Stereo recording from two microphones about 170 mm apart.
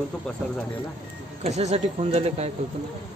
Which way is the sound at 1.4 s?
40° right (ahead or behind).